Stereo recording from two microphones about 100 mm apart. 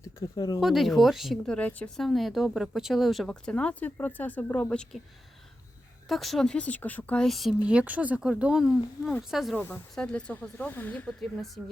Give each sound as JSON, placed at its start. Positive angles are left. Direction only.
{"t": 0.3, "sound": "speech", "side_deg": 40}
{"t": 0.6, "sound": "speech", "side_deg": 0}
{"t": 1.5, "sound": "speech", "side_deg": 10}
{"t": 2.0, "sound": "speech", "side_deg": 0}
{"t": 4.7, "sound": "speech", "side_deg": 10}
{"t": 6.1, "sound": "speech", "side_deg": 0}
{"t": 7.3, "sound": "speech", "side_deg": 0}
{"t": 7.6, "sound": "speech", "side_deg": -10}
{"t": 9.9, "sound": "speech", "side_deg": 10}